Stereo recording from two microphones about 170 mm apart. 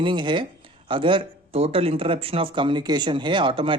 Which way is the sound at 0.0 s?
30° right (ahead or behind).